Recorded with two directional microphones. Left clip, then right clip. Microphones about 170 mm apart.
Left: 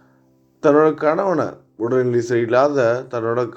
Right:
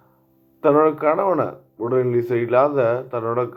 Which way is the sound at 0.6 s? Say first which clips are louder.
Left 2 dB; 25° left (ahead or behind).